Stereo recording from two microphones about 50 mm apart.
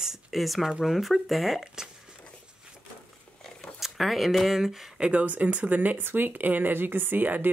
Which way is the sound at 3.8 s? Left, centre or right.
Centre.